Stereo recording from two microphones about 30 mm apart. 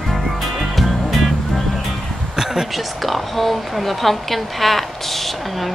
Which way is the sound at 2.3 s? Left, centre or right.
Centre.